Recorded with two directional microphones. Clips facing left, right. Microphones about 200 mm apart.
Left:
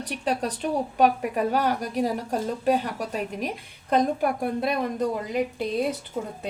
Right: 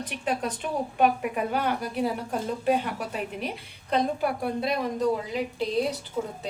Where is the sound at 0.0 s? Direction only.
40° left (ahead or behind).